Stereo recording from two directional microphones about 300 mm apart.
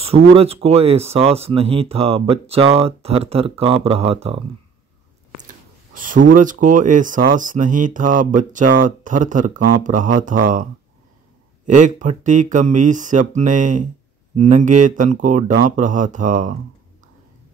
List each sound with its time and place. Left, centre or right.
0.0 s speech: centre
5.9 s speech: right